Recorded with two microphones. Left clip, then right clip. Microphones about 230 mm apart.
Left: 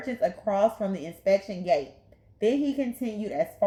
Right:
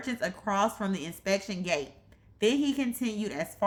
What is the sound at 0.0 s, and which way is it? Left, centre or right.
Speech, right.